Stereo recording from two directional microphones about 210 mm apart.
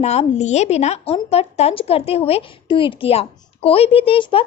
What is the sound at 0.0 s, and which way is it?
Speech, 30° left (ahead or behind).